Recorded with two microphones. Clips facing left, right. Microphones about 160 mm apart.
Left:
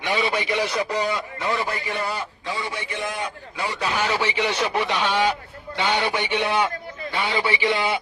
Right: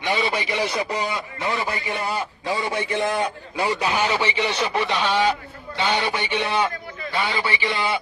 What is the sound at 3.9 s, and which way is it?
A man's voice, centre (ahead or behind).